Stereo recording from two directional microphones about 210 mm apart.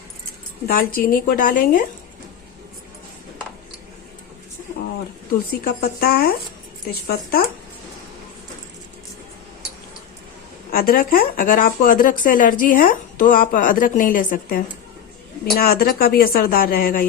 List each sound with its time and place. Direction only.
0.7 s speech: 45° left (ahead or behind)
5.3 s speech: 45° left (ahead or behind)
10.7 s speech: 45° left (ahead or behind)